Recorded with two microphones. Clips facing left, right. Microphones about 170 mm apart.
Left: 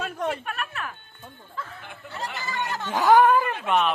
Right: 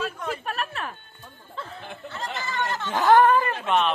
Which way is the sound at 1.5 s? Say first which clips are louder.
Right 2 dB; 30° right (ahead or behind).